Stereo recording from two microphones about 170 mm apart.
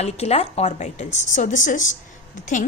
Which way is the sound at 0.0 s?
40° left (ahead or behind).